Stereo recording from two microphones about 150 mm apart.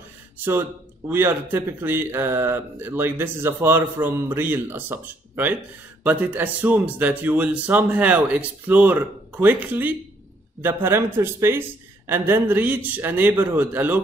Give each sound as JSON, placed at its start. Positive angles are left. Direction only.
{"t": 0.5, "sound": "speech", "side_deg": -15}